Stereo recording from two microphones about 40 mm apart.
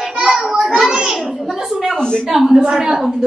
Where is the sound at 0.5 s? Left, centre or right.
Centre.